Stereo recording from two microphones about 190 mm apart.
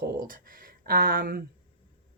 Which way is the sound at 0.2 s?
50° right (ahead or behind).